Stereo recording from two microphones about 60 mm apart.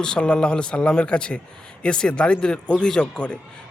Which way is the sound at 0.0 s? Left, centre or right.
Centre.